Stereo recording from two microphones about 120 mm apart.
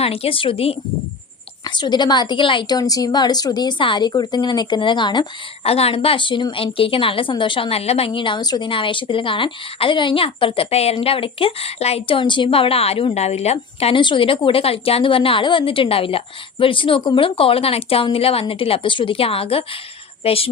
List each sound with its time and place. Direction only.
0.0 s a woman's voice: 55° left (ahead or behind)
1.6 s a woman's voice: 40° left (ahead or behind)
5.6 s a woman's voice: 55° left (ahead or behind)